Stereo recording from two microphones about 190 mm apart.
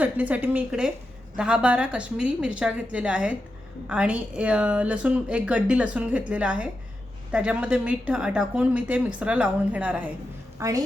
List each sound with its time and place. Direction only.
0.0 s a woman's voice: 10° right (ahead or behind)